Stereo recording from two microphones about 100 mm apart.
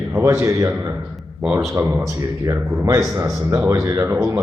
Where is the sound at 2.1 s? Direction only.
30° right (ahead or behind).